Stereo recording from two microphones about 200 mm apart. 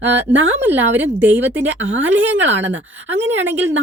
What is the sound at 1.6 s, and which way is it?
Speech, 70° right (ahead or behind).